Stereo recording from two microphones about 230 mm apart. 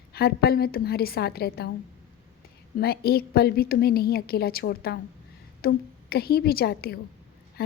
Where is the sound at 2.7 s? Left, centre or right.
Left.